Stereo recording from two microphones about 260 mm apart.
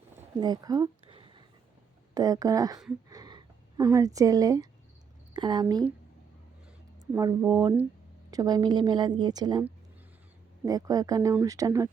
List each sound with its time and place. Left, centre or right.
0.2 s a sound: centre
2.1 s a woman's voice: centre
7.0 s a woman's voice: centre